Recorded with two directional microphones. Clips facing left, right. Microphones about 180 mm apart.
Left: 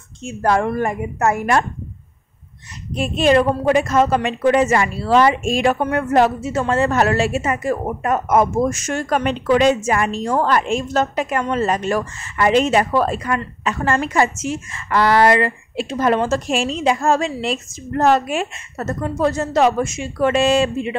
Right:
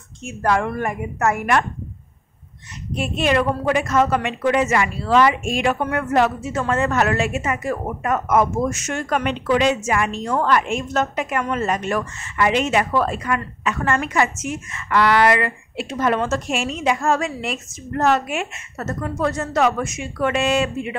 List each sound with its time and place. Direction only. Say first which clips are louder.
0.2 s a woman's voice: left 2 dB; 30° left (ahead or behind)
3.0 s speech: left 5 dB; 35° left (ahead or behind)